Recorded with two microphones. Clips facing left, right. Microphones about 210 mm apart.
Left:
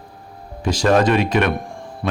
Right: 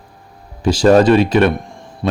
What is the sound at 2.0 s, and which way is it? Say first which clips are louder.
Mantra: right 4 dB; 25° right (ahead or behind).